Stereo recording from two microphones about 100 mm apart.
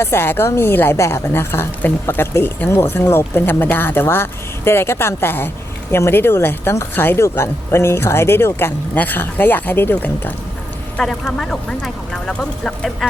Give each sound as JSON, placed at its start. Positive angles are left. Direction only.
{"t": 0.0, "sound": "a woman's voice", "side_deg": 25}